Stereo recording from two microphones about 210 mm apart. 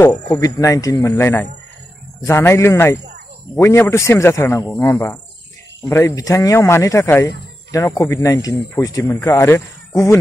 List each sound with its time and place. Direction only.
0.0 s speech: 15° left (ahead or behind)